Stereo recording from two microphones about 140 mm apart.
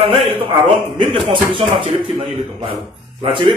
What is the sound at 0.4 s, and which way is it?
Speech, 40° right (ahead or behind).